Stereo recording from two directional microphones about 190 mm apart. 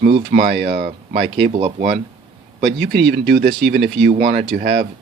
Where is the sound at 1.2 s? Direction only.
25° right (ahead or behind).